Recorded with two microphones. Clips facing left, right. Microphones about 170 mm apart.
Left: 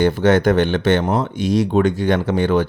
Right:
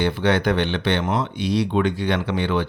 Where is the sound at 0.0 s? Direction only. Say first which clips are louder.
Left 6 dB; 45° left (ahead or behind).